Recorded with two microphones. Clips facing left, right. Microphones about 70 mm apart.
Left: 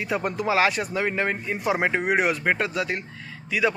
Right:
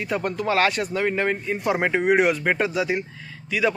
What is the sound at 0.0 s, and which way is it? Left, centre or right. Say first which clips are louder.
Speech: right 1 dB; centre.